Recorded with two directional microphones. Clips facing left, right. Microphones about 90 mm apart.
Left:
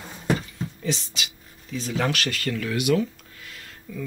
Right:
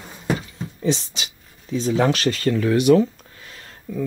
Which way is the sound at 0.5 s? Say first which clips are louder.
Right 6 dB; 30° right (ahead or behind).